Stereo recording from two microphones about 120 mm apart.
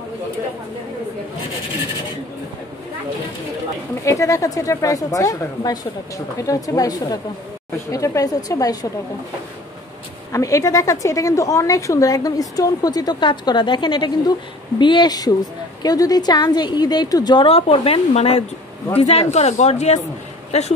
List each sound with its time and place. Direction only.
4.0 s a woman's voice: 25° left (ahead or behind)
10.3 s a woman's voice: 25° left (ahead or behind)
17.5 s speech: 55° left (ahead or behind)